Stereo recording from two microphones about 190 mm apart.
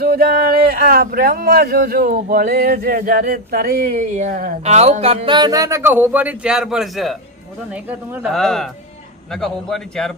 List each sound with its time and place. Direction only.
0.0 s speech: 55° right (ahead or behind); by 10.1 s 5° left (ahead or behind)